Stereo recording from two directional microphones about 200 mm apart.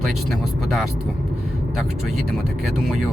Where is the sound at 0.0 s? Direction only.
Centre (ahead or behind).